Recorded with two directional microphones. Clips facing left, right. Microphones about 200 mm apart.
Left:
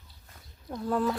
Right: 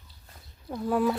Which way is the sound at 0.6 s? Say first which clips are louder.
Right 3 dB; 5° right (ahead or behind).